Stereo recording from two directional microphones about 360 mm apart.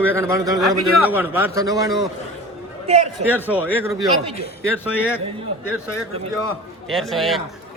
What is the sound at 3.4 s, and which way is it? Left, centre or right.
A man's voice, centre.